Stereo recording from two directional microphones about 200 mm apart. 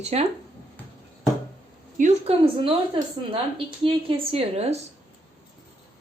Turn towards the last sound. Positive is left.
turn(degrees=-30)  # may be behind; listen again after turning